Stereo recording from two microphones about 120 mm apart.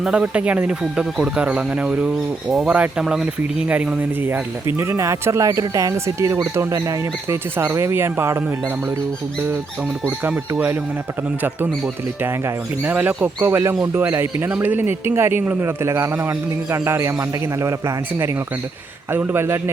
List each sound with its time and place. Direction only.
0.0 s speech: 5° right (ahead or behind)
10.1 s speech: 10° right (ahead or behind)
12.2 s speech: 15° right (ahead or behind)